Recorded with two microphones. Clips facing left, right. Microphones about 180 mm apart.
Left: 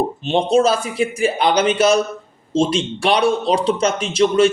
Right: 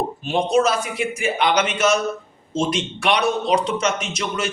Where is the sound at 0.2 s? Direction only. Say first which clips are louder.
Left 2 dB; 25° left (ahead or behind).